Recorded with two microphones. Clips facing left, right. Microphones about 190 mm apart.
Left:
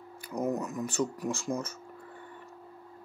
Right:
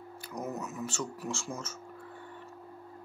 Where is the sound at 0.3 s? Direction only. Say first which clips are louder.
Left 7 dB; 35° left (ahead or behind).